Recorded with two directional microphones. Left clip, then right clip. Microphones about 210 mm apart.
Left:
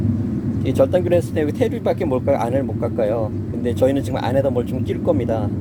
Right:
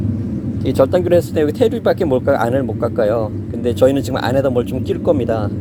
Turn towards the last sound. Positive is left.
turn(degrees=-30)  # may be behind; listen again after turning